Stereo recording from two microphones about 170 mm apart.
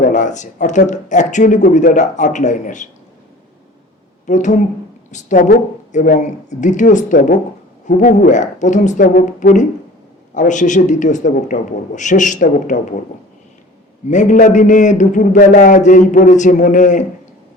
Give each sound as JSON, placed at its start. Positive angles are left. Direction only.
{"t": 0.0, "sound": "a man's voice", "side_deg": 45}
{"t": 4.3, "sound": "a man's voice", "side_deg": 45}
{"t": 14.1, "sound": "a man's voice", "side_deg": 45}